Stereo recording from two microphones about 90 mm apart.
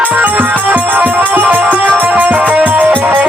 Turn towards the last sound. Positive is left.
turn(degrees=-20)  # may be behind; listen again after turning